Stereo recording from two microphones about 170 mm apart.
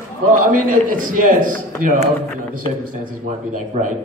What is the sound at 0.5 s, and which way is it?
A man's voice, 50° right (ahead or behind).